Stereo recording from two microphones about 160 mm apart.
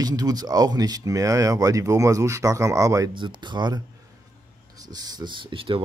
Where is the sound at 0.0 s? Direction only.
25° right (ahead or behind).